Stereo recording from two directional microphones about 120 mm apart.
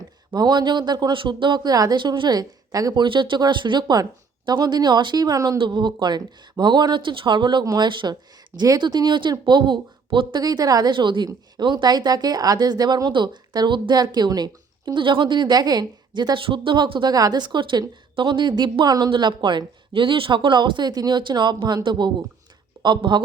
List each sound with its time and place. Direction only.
0.3 s speech: 35° right (ahead or behind)
5.5 s speech: 40° right (ahead or behind)
7.6 s speech: 30° right (ahead or behind)